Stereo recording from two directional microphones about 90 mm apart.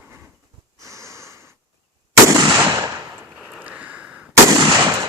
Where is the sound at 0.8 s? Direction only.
35° right (ahead or behind).